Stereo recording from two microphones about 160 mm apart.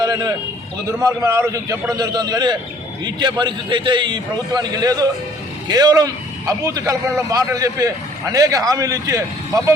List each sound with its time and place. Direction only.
0.0 s a man's voice: 25° right (ahead or behind)